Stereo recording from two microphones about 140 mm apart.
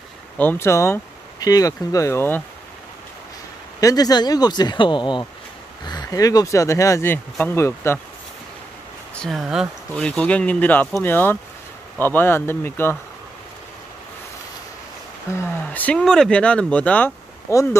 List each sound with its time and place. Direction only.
0.4 s speech: 15° left (ahead or behind)
3.8 s speech: 30° left (ahead or behind)
9.1 s speech: 5° left (ahead or behind)
9.9 s speech: 5° left (ahead or behind)
15.3 s speech: 15° left (ahead or behind)
17.5 s speech: 20° left (ahead or behind)